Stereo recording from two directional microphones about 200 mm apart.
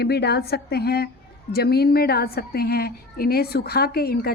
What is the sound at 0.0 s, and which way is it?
A woman's voice, 55° left (ahead or behind).